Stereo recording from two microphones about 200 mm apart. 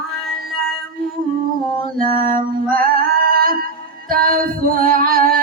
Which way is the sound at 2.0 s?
45° right (ahead or behind).